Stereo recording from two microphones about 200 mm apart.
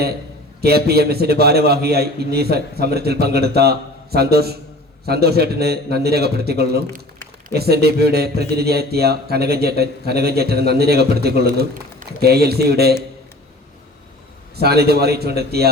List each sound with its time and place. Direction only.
0.6 s speech: 50° right (ahead or behind)
14.5 s speech: 55° right (ahead or behind)